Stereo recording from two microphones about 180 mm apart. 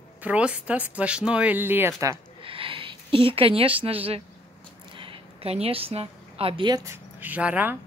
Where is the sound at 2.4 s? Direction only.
30° right (ahead or behind).